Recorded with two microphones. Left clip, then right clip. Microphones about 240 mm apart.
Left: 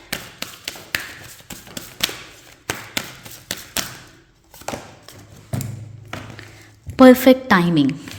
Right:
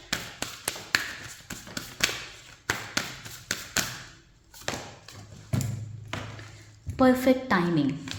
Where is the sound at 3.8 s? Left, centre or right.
Left.